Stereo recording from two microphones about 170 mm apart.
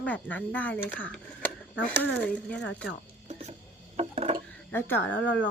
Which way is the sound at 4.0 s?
35° right (ahead or behind).